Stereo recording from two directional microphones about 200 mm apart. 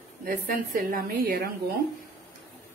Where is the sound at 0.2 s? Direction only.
45° right (ahead or behind).